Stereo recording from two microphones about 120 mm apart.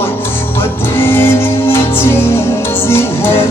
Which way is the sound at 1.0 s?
20° left (ahead or behind).